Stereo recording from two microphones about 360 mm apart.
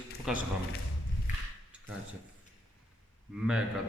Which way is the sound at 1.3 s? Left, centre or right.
Left.